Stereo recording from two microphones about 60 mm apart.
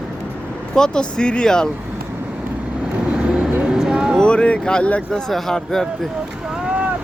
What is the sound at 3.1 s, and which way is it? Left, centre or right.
Vehicle, centre.